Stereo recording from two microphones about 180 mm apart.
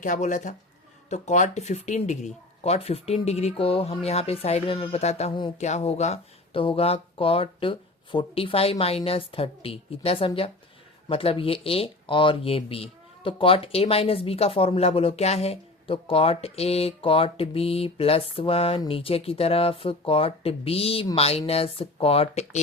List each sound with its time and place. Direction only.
0.0 s speech: 45° left (ahead or behind)